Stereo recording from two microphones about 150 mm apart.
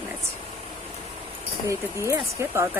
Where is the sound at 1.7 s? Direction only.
20° right (ahead or behind).